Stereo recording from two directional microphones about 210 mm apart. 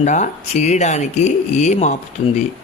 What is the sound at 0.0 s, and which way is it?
Speech, 35° left (ahead or behind).